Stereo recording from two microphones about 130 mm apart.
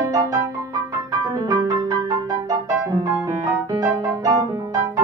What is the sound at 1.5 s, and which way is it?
Music, 25° right (ahead or behind).